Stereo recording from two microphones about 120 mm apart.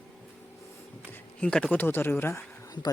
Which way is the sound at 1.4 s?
10° left (ahead or behind).